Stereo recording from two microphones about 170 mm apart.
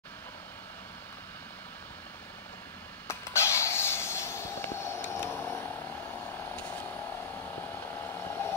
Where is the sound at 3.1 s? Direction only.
15° left (ahead or behind).